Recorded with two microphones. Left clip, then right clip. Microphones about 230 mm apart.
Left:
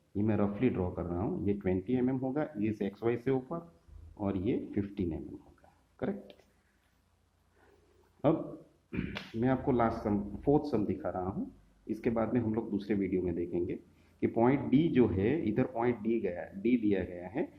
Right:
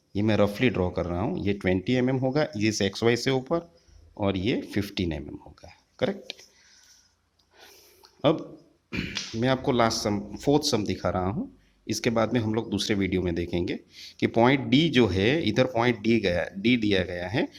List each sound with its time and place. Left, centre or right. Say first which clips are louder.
0.1 s speech: right 9 dB; right
8.9 s speech: right 8 dB; right